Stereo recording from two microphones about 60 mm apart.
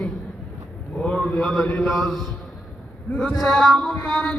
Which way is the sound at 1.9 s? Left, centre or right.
Centre.